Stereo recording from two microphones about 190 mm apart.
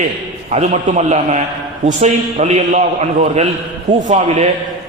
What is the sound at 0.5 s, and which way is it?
A man's voice, 35° right (ahead or behind).